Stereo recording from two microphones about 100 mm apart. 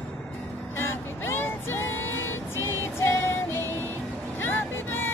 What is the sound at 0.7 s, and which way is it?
Vehicle, 25° left (ahead or behind).